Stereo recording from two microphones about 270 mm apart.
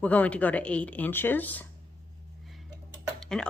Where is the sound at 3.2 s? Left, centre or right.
Centre.